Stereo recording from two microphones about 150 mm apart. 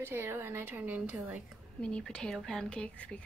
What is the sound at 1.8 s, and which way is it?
A woman's voice, 5° left (ahead or behind).